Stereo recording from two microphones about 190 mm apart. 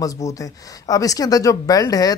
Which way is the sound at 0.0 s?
15° left (ahead or behind).